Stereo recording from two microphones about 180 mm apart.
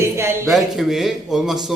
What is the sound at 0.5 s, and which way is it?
A man's voice, centre (ahead or behind).